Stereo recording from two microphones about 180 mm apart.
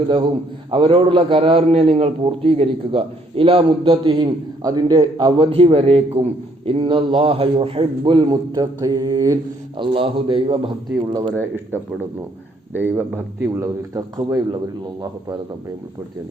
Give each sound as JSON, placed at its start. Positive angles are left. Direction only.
{"t": 0.7, "sound": "a man's voice", "side_deg": -30}